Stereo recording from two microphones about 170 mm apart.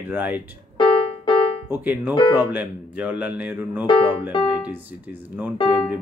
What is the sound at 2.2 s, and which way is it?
Speech, 30° left (ahead or behind).